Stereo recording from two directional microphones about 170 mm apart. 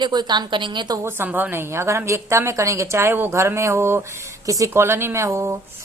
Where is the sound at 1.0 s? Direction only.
10° right (ahead or behind).